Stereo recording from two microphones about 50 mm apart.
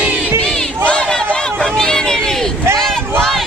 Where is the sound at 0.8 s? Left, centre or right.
Centre.